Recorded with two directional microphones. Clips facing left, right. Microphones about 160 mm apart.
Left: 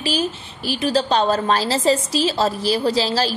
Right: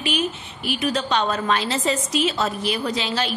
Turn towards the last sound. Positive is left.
turn(degrees=35)  # may be behind; listen again after turning